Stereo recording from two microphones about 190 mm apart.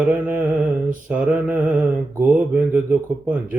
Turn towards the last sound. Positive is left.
turn(degrees=-10)  # may be behind; listen again after turning